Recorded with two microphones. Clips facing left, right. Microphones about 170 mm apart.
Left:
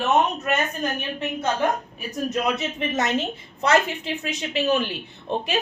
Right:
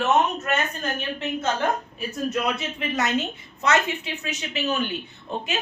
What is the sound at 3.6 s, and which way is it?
A woman's voice, 30° left (ahead or behind).